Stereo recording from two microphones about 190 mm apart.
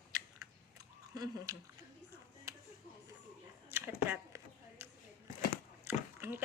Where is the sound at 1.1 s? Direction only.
20° right (ahead or behind).